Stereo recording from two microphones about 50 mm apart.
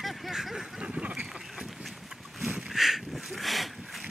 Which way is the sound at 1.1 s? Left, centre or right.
Centre.